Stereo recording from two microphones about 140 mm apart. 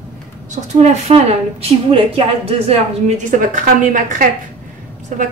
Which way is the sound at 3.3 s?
70° right (ahead or behind).